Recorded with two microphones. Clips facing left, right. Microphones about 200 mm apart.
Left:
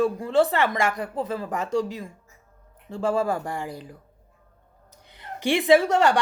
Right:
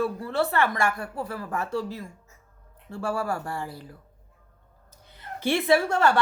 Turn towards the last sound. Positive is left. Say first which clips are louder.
# left 3 dB
turn(degrees=15)  # may be behind; listen again after turning